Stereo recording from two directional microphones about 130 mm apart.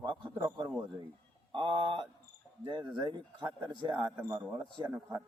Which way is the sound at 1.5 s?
35° right (ahead or behind).